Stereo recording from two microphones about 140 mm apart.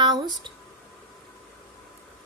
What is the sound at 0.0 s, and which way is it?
Speech, 30° right (ahead or behind).